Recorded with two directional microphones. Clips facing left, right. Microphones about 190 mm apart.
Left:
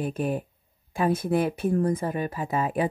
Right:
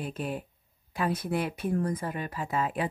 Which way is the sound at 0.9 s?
25° left (ahead or behind).